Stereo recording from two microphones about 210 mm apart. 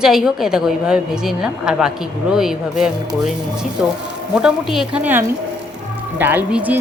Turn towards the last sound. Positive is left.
turn(degrees=-10)  # may be behind; listen again after turning